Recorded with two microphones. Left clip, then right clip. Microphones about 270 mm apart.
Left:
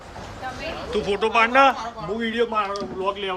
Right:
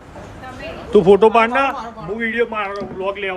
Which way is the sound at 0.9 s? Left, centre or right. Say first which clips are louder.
Right 13 dB; centre.